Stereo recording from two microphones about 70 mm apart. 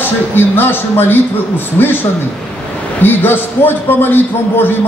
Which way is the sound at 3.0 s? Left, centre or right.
Left.